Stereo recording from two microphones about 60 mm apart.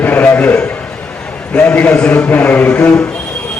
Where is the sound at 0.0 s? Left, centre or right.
Left.